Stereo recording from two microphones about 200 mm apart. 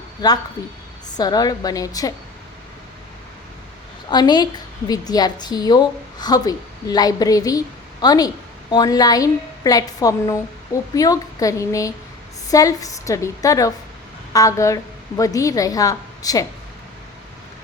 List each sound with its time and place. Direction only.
0.2 s a woman's voice: 20° left (ahead or behind)
4.1 s a woman's voice: 20° left (ahead or behind)